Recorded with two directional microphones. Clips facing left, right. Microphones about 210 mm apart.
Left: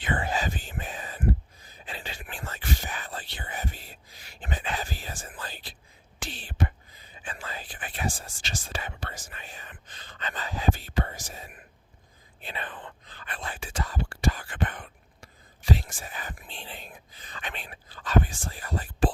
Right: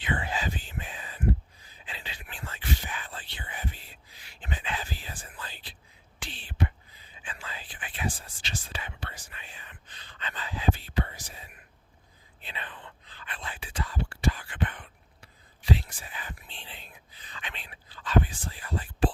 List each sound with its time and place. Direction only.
0.0 s whispering: 45° left (ahead or behind)